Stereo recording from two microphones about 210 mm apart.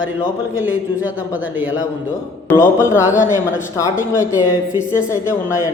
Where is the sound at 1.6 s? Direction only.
65° left (ahead or behind).